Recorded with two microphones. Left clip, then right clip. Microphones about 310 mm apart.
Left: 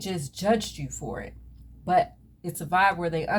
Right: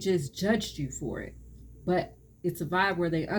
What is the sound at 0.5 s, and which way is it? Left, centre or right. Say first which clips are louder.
Speech: left 5 dB; left.